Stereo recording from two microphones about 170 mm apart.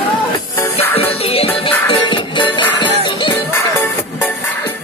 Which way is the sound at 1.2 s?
35° left (ahead or behind).